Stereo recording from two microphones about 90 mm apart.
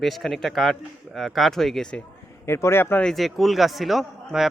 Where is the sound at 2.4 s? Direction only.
30° left (ahead or behind).